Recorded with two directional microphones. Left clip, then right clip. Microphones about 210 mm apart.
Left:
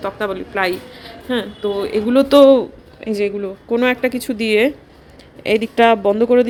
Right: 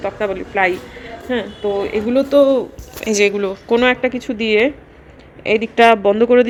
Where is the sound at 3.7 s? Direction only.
20° left (ahead or behind).